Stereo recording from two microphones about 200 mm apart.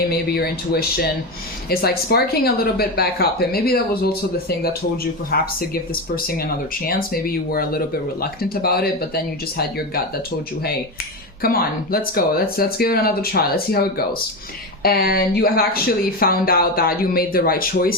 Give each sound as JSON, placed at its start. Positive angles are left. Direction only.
{"t": 0.1, "sound": "speech", "side_deg": 50}
{"t": 11.4, "sound": "speech", "side_deg": 45}